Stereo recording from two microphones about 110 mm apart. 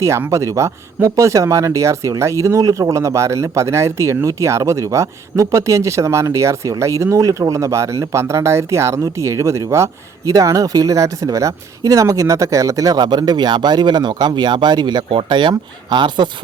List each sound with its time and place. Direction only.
0.0 s speech: 25° right (ahead or behind); by 16.3 s 45° right (ahead or behind)